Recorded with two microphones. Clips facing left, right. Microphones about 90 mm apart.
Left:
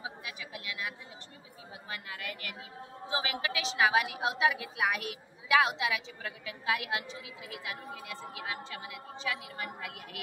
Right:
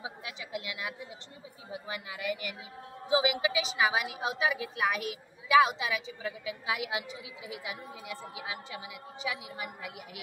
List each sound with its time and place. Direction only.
0.0 s chatter: 20° right (ahead or behind)
1.7 s a woman's voice: 15° right (ahead or behind)